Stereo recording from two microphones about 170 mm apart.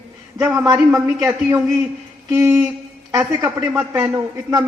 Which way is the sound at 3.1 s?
20° right (ahead or behind).